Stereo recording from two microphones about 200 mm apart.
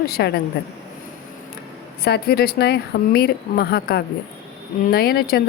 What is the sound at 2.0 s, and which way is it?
A woman's voice, 50° left (ahead or behind).